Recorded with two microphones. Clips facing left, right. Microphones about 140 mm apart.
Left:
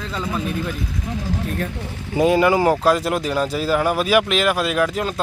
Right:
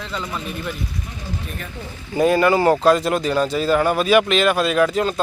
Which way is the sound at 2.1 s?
15° left (ahead or behind).